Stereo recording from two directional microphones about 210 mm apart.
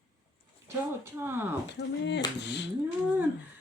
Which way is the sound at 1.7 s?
55° left (ahead or behind).